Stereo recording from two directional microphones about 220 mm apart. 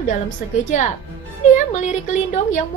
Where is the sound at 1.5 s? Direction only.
35° left (ahead or behind).